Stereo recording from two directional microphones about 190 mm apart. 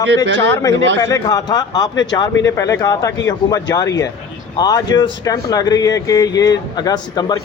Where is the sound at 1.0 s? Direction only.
15° left (ahead or behind).